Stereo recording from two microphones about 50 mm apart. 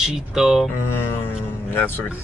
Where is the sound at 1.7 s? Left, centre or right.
Left.